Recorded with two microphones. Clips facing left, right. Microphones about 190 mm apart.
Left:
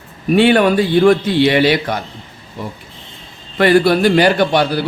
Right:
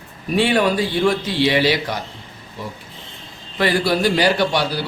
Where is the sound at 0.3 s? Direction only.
60° left (ahead or behind).